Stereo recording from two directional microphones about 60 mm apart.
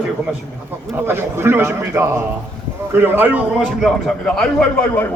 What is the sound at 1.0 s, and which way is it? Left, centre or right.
A man's voice, right.